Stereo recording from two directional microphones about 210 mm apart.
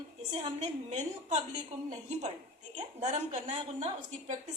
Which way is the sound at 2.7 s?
35° right (ahead or behind).